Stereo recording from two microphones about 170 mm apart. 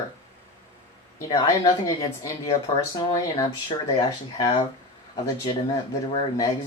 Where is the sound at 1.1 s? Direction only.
20° left (ahead or behind).